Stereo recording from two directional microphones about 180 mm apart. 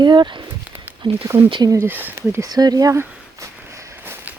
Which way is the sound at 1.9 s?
10° right (ahead or behind).